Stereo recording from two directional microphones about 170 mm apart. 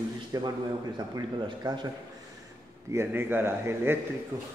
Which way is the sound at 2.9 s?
15° right (ahead or behind).